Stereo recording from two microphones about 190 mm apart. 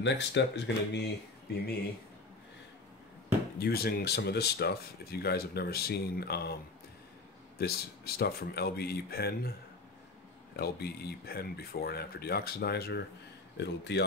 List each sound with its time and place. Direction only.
0.0 s speech: 65° left (ahead or behind)
3.5 s speech: 55° left (ahead or behind)
10.5 s speech: 55° left (ahead or behind)